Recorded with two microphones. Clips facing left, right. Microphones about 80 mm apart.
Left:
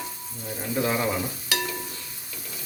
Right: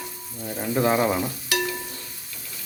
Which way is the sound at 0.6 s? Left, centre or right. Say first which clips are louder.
Right 5 dB; right.